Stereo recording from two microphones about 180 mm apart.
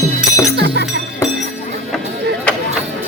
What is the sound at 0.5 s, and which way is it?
Music, 65° right (ahead or behind).